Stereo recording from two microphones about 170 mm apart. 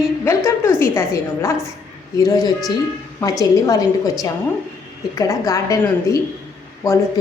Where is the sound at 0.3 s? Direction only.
15° left (ahead or behind).